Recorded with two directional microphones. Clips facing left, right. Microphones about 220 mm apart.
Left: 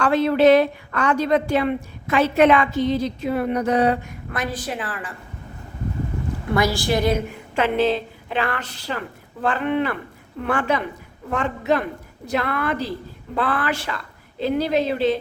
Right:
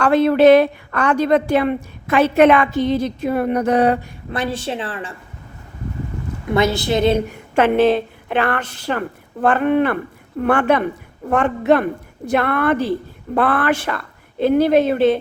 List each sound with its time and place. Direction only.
0.0 s a woman's voice: 55° right (ahead or behind)
4.3 s a woman's voice: 25° right (ahead or behind)
6.5 s a woman's voice: 20° right (ahead or behind)
7.3 s a woman's voice: 50° right (ahead or behind)